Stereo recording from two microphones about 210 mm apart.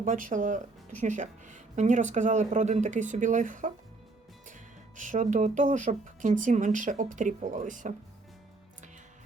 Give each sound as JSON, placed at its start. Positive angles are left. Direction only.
{"t": 0.0, "sound": "speech", "side_deg": -40}